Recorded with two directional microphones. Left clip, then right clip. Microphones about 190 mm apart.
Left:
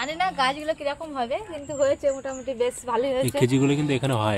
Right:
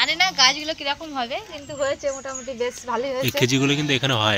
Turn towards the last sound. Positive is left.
turn(degrees=5)  # may be behind; listen again after turning